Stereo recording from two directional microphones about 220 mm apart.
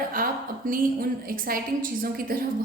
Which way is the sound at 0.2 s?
40° right (ahead or behind).